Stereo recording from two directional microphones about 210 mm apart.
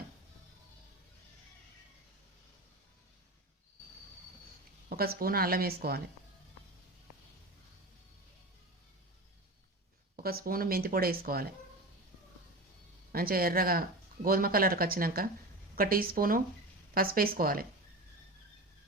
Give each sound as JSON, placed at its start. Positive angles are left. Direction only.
{"t": 4.9, "sound": "speech", "side_deg": -45}
{"t": 10.2, "sound": "speech", "side_deg": -45}
{"t": 13.1, "sound": "speech", "side_deg": -45}